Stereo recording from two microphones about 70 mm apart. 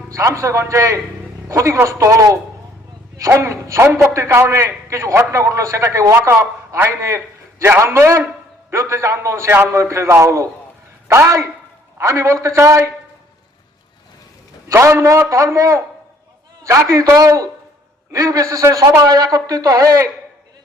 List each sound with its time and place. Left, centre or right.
0.1 s a man's voice: right
3.2 s a woman's voice: right
14.7 s a man's voice: right
17.2 s a man's voice: right
19.0 s a woman's voice: right